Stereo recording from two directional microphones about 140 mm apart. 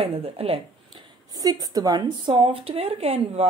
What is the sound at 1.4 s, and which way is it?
Speech, 30° right (ahead or behind).